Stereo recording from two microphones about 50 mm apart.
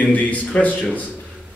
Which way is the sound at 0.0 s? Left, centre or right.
Left.